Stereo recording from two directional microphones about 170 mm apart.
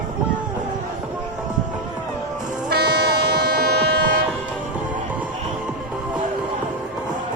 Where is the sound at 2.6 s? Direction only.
70° right (ahead or behind).